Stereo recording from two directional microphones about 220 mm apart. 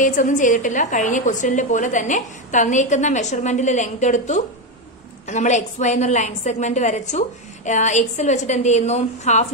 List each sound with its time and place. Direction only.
0.0 s a woman's voice: 35° left (ahead or behind)